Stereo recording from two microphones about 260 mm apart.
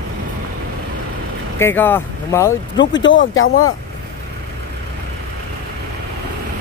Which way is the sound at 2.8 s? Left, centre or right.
Left.